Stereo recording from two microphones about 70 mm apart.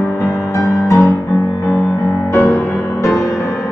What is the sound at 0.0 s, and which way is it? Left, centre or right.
Music, left.